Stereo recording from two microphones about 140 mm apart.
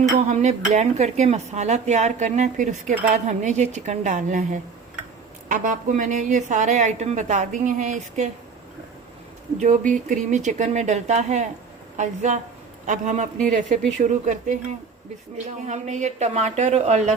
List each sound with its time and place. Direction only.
0.3 s a woman's voice: 55° right (ahead or behind)
5.5 s a woman's voice: 70° right (ahead or behind)
9.6 s a woman's voice: 65° right (ahead or behind)